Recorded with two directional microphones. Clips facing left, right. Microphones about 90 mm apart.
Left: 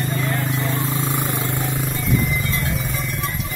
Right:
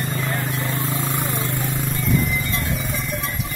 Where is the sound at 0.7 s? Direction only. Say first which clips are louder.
Left 2 dB; 20° left (ahead or behind).